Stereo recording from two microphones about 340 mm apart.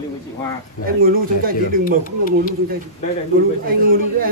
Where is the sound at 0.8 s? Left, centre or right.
Right.